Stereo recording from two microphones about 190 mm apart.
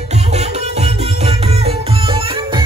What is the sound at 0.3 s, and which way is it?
Music, 35° right (ahead or behind).